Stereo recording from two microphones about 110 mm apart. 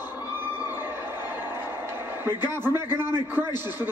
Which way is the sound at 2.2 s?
20° right (ahead or behind).